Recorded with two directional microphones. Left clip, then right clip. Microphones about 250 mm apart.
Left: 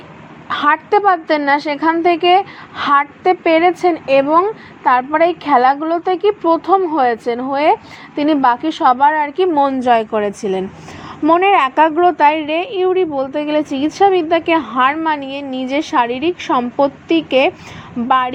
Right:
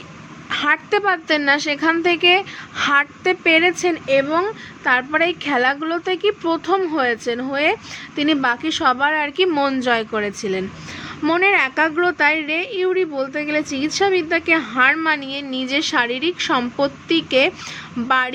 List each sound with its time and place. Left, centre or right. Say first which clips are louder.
0.6 s a woman's voice: left 6 dB; centre